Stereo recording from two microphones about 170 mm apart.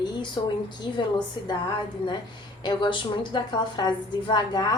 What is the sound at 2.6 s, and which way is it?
A woman's voice, 25° left (ahead or behind).